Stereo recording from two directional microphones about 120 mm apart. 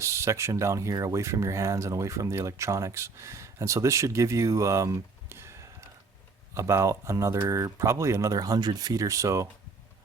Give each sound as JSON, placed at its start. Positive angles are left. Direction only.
{"t": 0.0, "sound": "speech", "side_deg": -25}